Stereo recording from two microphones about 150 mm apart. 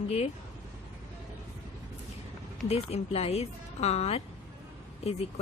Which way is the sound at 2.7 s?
40° left (ahead or behind).